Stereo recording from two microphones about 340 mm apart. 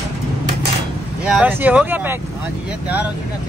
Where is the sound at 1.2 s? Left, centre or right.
Centre.